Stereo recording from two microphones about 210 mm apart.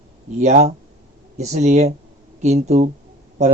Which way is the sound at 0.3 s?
35° right (ahead or behind).